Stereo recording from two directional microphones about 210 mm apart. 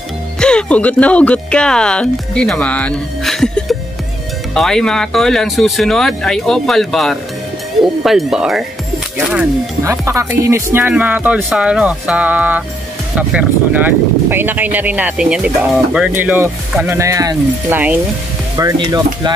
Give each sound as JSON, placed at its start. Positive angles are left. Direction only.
{"t": 0.4, "sound": "speech", "side_deg": 5}